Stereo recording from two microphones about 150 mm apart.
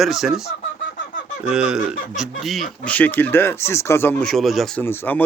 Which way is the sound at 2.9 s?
10° left (ahead or behind).